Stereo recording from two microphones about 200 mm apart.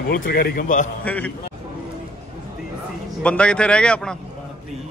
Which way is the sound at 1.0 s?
5° left (ahead or behind).